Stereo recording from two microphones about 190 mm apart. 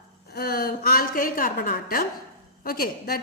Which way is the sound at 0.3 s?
55° left (ahead or behind).